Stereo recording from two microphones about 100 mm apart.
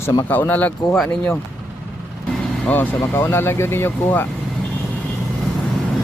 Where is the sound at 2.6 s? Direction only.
20° left (ahead or behind).